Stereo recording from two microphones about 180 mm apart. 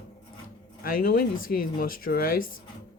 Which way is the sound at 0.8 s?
55° left (ahead or behind).